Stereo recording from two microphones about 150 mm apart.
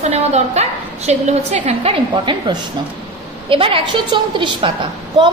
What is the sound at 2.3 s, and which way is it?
Speech, 30° right (ahead or behind).